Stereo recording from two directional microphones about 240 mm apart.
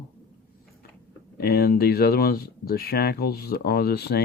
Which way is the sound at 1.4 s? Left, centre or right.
Left.